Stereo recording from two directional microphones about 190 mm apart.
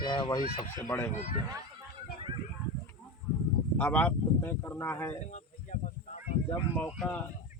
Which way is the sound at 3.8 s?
10° left (ahead or behind).